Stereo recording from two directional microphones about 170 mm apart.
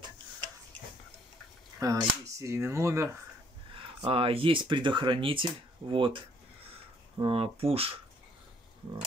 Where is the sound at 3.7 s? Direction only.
30° right (ahead or behind).